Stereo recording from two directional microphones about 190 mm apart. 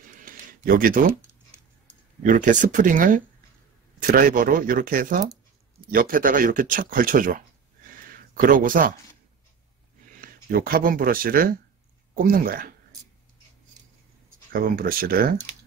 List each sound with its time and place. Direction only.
0.2 s a sound: 45° right (ahead or behind)
2.2 s speech: 40° right (ahead or behind)
10.2 s speech: 50° right (ahead or behind)
14.5 s speech: 50° right (ahead or behind)